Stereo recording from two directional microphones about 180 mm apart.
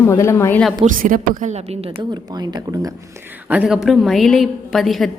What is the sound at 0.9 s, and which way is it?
A woman's voice, 50° right (ahead or behind).